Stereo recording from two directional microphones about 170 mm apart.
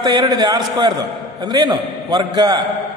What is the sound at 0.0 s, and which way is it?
A man's voice, 25° right (ahead or behind).